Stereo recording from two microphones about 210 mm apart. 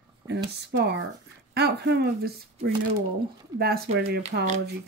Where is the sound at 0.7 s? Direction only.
55° right (ahead or behind).